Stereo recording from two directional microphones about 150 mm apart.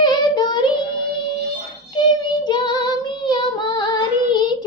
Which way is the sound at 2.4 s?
30° left (ahead or behind).